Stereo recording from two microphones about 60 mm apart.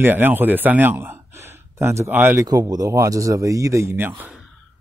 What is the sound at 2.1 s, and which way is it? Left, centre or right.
Speech, right.